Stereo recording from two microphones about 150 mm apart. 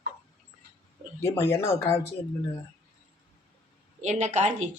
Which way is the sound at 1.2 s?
20° left (ahead or behind).